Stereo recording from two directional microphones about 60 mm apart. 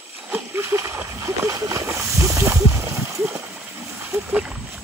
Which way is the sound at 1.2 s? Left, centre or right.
Right.